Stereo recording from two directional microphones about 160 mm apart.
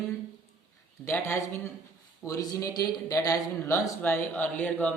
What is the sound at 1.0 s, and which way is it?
A man's voice, 15° left (ahead or behind).